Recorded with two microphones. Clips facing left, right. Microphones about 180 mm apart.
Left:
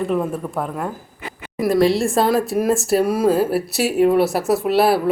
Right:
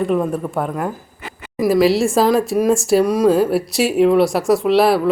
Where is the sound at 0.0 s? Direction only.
Centre (ahead or behind).